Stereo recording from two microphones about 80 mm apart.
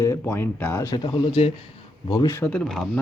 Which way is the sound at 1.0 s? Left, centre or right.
Left.